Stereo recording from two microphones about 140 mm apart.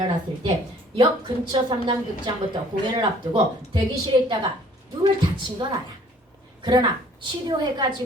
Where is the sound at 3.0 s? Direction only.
35° right (ahead or behind).